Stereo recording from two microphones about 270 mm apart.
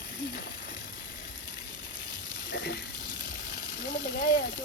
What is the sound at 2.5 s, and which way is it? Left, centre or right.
Water, left.